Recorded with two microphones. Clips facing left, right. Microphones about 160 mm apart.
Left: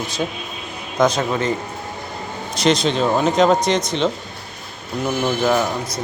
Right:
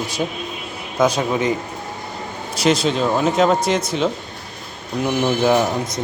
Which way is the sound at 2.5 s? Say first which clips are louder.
Even; 5° right (ahead or behind).